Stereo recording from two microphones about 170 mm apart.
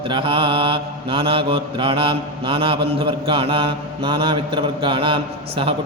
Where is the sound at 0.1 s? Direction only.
30° right (ahead or behind).